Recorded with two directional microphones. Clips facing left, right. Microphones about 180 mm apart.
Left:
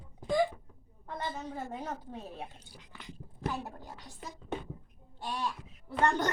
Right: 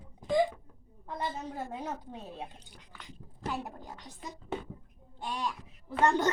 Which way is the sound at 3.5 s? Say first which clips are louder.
Right 2 dB; 15° right (ahead or behind).